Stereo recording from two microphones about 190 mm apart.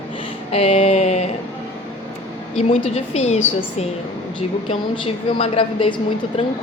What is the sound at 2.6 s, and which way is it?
A woman's voice, 35° left (ahead or behind).